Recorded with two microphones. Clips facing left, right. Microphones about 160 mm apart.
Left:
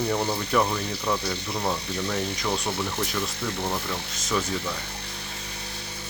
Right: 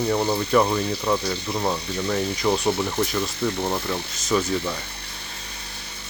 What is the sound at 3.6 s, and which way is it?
Speech, 20° right (ahead or behind).